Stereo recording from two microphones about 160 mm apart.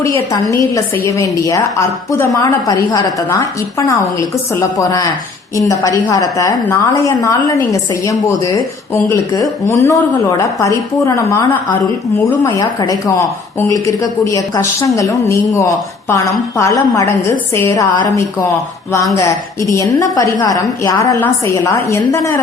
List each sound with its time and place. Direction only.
0.0 s a woman's voice: 20° left (ahead or behind)
19.7 s a woman's voice: 20° left (ahead or behind)